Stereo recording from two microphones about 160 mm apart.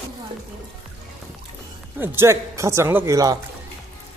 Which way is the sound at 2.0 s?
15° right (ahead or behind).